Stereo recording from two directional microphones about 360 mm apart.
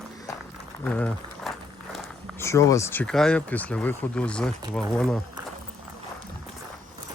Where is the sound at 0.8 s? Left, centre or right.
Centre.